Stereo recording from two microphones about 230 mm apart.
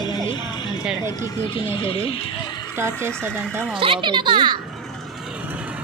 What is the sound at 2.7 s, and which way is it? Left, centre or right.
Speech, centre.